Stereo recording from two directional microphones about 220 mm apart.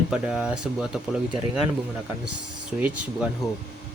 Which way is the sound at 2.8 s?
5° right (ahead or behind).